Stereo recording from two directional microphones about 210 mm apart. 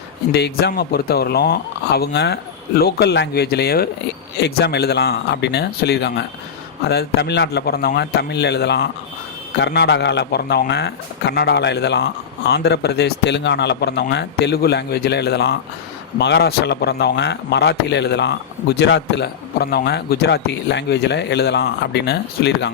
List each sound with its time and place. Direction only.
0.3 s a man's voice: 50° left (ahead or behind)